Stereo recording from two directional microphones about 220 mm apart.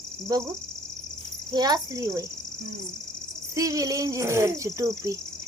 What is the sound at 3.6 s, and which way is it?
Speech, 15° right (ahead or behind).